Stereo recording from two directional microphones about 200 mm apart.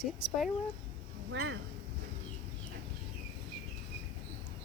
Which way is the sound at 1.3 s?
65° right (ahead or behind).